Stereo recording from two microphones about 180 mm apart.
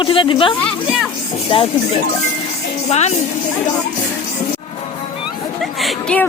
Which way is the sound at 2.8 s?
40° left (ahead or behind).